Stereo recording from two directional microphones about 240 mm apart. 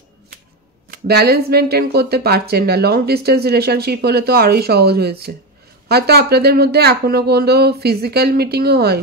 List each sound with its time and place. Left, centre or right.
0.8 s speech: right